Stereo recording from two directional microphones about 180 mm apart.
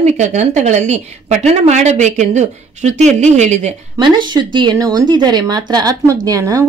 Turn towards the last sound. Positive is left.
turn(degrees=-20)  # may be behind; listen again after turning